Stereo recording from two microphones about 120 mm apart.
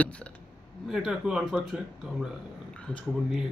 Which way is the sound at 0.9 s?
5° right (ahead or behind).